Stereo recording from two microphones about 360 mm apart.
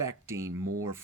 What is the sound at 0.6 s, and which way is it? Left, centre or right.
Speech, right.